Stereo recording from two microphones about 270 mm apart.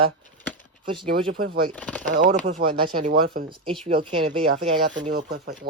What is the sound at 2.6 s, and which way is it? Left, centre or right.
Speech, centre.